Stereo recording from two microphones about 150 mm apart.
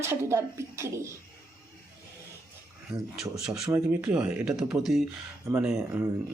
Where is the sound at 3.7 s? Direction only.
10° right (ahead or behind).